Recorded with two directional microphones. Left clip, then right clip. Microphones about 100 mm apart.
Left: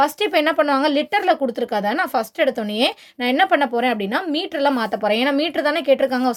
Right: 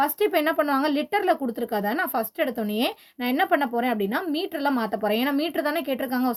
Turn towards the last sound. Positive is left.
turn(degrees=30)  # may be behind; listen again after turning